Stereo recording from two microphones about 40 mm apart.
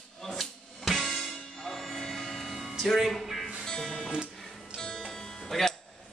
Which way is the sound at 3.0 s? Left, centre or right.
Centre.